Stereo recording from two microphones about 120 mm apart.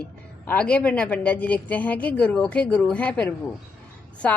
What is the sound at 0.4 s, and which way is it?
A woman's voice, 10° left (ahead or behind).